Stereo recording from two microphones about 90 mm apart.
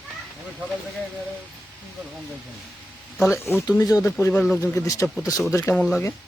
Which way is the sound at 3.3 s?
25° left (ahead or behind).